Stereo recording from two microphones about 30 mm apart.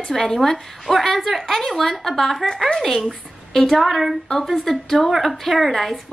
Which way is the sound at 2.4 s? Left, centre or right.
Left.